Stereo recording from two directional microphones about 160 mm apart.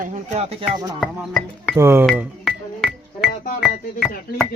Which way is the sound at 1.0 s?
5° left (ahead or behind).